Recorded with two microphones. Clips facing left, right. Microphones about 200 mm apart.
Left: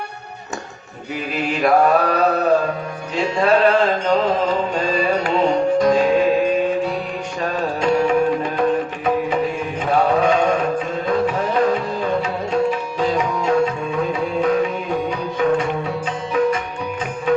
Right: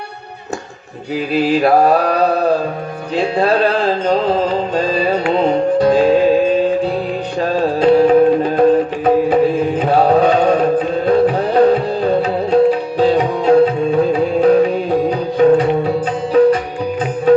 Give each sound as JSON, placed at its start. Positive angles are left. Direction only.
{"t": 1.1, "sound": "mantra", "side_deg": -35}
{"t": 5.8, "sound": "music", "side_deg": -35}
{"t": 7.4, "sound": "music", "side_deg": -35}